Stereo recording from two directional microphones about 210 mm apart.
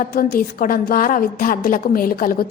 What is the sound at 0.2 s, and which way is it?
A woman's voice, 45° left (ahead or behind).